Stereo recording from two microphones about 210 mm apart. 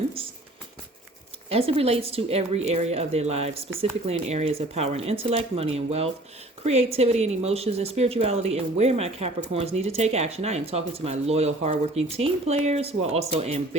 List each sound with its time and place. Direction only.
1.5 s speech: 25° right (ahead or behind)